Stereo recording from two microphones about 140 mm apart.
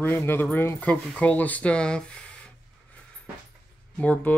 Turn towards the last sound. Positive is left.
turn(degrees=10)  # may be behind; listen again after turning